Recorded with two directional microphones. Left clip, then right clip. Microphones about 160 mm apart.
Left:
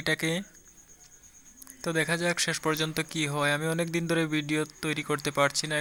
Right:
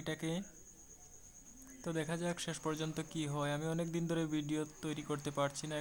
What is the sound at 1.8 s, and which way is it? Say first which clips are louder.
A man's voice: left 12 dB; 15° left (ahead or behind).